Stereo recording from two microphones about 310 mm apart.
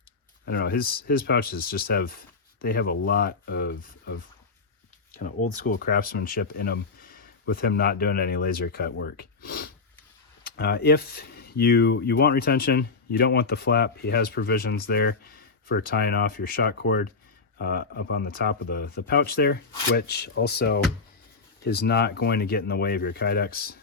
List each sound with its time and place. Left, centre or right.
0.4 s speech: left
5.1 s speech: left